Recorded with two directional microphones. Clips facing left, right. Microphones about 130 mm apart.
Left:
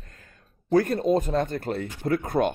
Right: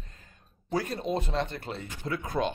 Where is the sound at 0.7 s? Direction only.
55° left (ahead or behind).